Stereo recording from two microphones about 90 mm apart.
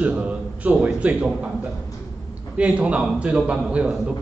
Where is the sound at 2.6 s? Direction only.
15° right (ahead or behind).